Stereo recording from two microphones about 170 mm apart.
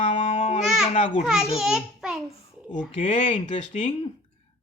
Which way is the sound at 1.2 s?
5° right (ahead or behind).